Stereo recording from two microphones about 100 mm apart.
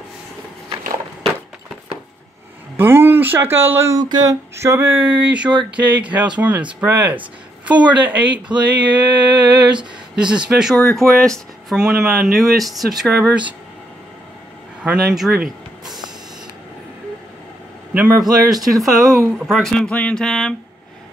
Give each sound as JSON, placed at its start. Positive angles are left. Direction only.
{"t": 2.8, "sound": "speech", "side_deg": -20}
{"t": 4.0, "sound": "a sound", "side_deg": -40}
{"t": 10.1, "sound": "speech", "side_deg": -10}
{"t": 14.8, "sound": "a sound", "side_deg": -5}
{"t": 17.9, "sound": "speech", "side_deg": -20}
{"t": 18.7, "sound": "speech", "side_deg": 0}